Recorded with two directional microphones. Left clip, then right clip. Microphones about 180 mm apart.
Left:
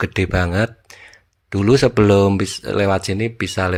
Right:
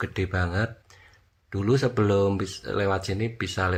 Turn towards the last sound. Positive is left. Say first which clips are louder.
# left 7 dB
turn(degrees=35)  # may be behind; listen again after turning